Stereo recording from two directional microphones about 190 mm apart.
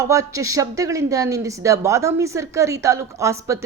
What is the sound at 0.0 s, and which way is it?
A woman's voice, 15° right (ahead or behind).